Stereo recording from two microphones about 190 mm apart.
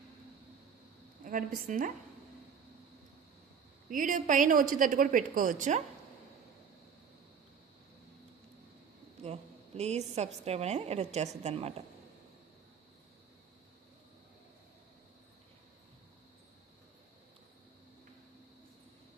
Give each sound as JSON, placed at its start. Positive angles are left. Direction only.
{"t": 1.2, "sound": "a woman's voice", "side_deg": -45}
{"t": 3.8, "sound": "a woman's voice", "side_deg": -45}
{"t": 9.2, "sound": "a woman's voice", "side_deg": -35}